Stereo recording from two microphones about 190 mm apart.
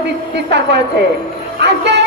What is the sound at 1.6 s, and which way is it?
Speech, 65° right (ahead or behind).